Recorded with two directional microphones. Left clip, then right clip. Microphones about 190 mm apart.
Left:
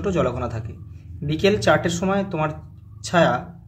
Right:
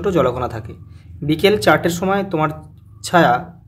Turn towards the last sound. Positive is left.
turn(degrees=-30)  # may be behind; listen again after turning